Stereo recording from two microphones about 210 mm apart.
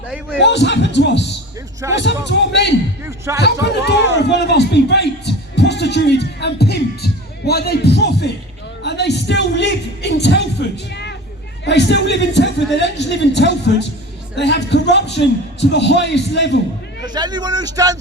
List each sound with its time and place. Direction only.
0.3 s a man's voice: 55° left (ahead or behind)
3.0 s speech: 15° right (ahead or behind)
3.4 s a man's voice: 55° left (ahead or behind)
17.1 s speech: 20° right (ahead or behind)